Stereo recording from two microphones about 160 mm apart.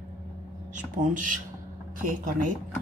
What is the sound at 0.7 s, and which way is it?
Speech, 55° right (ahead or behind).